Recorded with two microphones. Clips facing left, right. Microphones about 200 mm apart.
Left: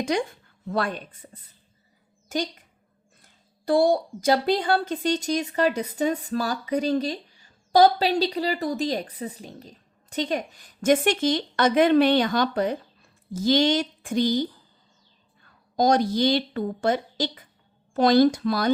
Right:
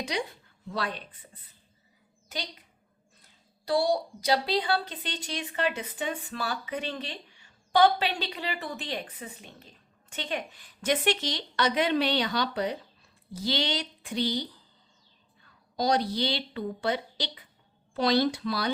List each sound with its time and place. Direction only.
0.0 s speech: 50° left (ahead or behind)
3.7 s a woman's voice: 50° left (ahead or behind)
15.7 s speech: 45° left (ahead or behind)